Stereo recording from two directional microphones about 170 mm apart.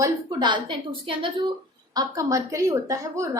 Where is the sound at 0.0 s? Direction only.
25° right (ahead or behind).